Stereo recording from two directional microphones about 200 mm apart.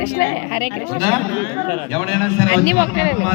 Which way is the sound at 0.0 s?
35° left (ahead or behind).